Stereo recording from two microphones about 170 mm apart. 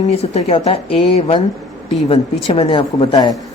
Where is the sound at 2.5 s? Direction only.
35° left (ahead or behind).